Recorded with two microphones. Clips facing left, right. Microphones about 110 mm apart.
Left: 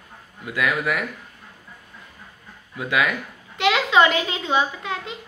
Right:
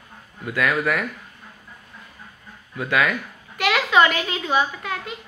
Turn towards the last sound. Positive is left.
turn(degrees=25)  # may be behind; listen again after turning